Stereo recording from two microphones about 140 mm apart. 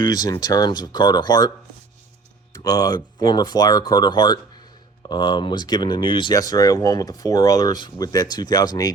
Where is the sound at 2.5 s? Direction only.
25° left (ahead or behind).